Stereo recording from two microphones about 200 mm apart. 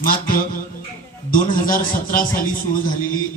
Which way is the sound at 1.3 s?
45° left (ahead or behind).